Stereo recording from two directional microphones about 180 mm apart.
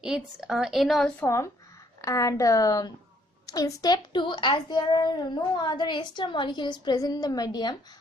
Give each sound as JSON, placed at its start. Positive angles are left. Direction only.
{"t": 0.0, "sound": "a woman's voice", "side_deg": -5}
{"t": 1.2, "sound": "a child's voice", "side_deg": 15}